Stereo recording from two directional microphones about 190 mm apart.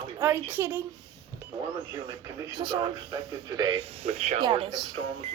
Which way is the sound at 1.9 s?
20° right (ahead or behind).